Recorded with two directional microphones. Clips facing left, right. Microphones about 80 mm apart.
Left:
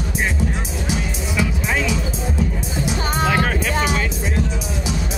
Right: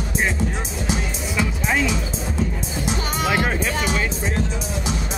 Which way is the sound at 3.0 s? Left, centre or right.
Left.